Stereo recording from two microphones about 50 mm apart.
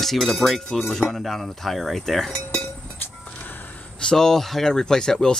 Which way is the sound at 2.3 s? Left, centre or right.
Left.